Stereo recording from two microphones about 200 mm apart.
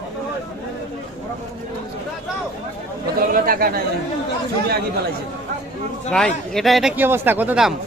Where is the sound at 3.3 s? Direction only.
45° right (ahead or behind).